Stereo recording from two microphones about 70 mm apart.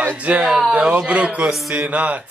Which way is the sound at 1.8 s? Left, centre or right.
Right.